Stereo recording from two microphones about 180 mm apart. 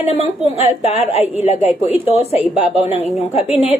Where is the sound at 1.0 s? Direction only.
10° right (ahead or behind).